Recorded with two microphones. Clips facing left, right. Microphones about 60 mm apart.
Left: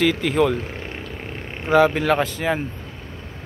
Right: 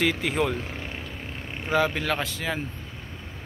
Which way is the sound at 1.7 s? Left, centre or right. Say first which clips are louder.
Left 8 dB; left.